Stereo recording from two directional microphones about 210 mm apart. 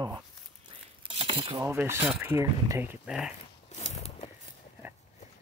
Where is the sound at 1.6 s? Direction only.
10° right (ahead or behind).